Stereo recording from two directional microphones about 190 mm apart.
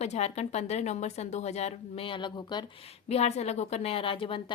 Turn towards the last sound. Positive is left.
turn(degrees=25)  # may be behind; listen again after turning